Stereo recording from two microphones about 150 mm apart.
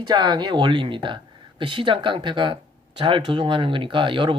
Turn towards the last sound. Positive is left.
turn(degrees=-35)  # may be behind; listen again after turning